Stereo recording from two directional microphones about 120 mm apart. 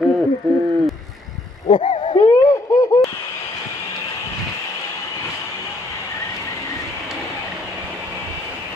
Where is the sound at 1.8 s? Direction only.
45° left (ahead or behind).